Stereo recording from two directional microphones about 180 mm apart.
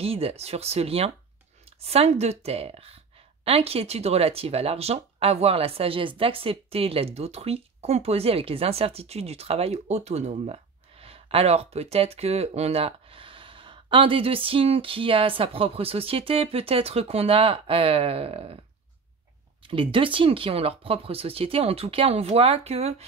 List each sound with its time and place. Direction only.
0.0 s speech: 35° right (ahead or behind)
19.7 s speech: 30° right (ahead or behind)